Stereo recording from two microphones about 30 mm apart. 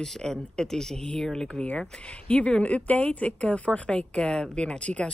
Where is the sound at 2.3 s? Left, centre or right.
Left.